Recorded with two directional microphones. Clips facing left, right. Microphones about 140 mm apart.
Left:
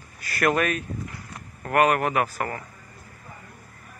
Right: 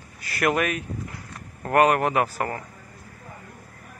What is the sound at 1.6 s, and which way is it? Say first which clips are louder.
Speech: right 2 dB; 25° right (ahead or behind).